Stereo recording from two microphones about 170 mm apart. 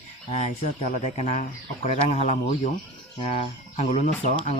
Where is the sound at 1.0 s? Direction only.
40° left (ahead or behind).